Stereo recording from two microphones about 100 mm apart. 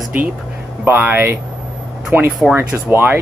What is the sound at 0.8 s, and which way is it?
Speech, 20° right (ahead or behind).